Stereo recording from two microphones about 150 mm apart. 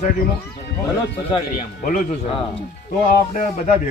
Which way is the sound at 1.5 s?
65° left (ahead or behind).